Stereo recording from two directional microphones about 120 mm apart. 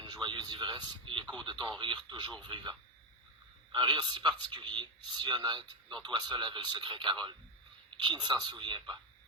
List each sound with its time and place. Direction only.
0.0 s a man's voice: 40° right (ahead or behind)
3.7 s a man's voice: 40° right (ahead or behind)